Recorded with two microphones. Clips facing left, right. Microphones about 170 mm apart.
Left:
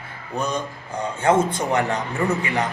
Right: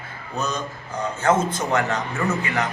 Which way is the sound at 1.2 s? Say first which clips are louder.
Left 2 dB; 30° left (ahead or behind).